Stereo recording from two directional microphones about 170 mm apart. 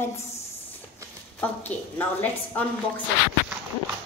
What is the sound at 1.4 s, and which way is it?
A woman's voice, 10° left (ahead or behind).